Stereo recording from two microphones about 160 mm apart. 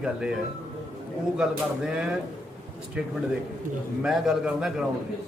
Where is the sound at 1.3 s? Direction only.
5° right (ahead or behind).